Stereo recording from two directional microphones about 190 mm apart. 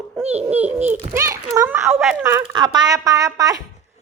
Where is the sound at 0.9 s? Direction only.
15° right (ahead or behind).